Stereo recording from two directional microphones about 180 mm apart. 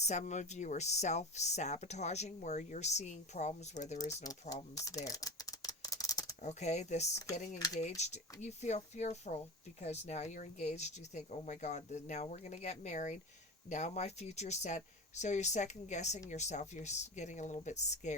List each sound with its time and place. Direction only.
0.0 s speech: 40° left (ahead or behind)
4.1 s speech: 20° left (ahead or behind)
4.7 s rattle: 20° left (ahead or behind)
6.4 s speech: 40° left (ahead or behind)